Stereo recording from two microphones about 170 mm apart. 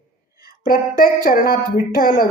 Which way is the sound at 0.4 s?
55° left (ahead or behind).